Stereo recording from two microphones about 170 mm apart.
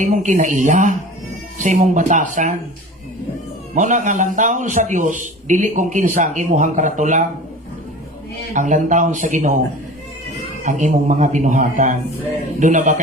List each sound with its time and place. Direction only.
0.0 s a man's voice: 45° right (ahead or behind)
3.8 s a man's voice: 45° right (ahead or behind)
8.5 s a man's voice: 50° right (ahead or behind)
10.6 s a man's voice: 50° right (ahead or behind)